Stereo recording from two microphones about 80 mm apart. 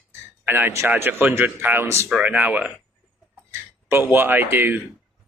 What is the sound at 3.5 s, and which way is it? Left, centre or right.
Speech, right.